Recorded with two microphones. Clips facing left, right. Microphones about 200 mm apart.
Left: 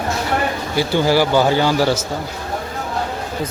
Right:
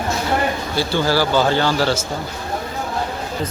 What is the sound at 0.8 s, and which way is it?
Speech, 15° left (ahead or behind).